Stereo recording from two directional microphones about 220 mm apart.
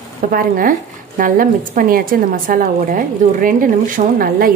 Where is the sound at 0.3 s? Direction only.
40° right (ahead or behind).